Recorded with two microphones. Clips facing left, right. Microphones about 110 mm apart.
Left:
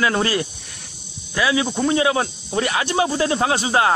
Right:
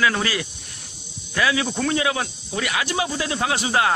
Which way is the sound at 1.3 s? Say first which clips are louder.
Left 2 dB; 20° left (ahead or behind).